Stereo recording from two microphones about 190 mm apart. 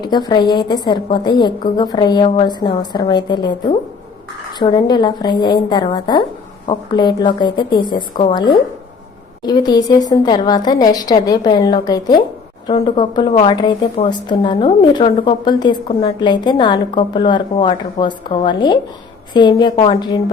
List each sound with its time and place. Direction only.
0.0 s a woman's voice: 20° left (ahead or behind)